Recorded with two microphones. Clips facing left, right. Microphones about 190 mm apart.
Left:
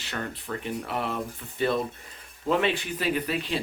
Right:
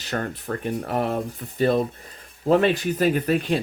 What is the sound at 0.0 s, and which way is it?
Speech, 45° right (ahead or behind).